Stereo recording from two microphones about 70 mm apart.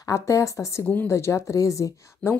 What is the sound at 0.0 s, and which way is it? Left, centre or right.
Speech, left.